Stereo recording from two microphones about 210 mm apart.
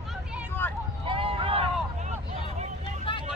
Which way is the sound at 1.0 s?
25° right (ahead or behind).